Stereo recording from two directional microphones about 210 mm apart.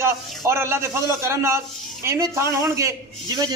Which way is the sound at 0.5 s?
10° right (ahead or behind).